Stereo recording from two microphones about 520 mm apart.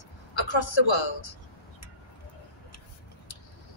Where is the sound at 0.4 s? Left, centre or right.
Left.